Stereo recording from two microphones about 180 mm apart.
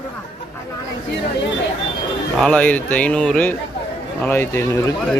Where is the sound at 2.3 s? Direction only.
5° left (ahead or behind).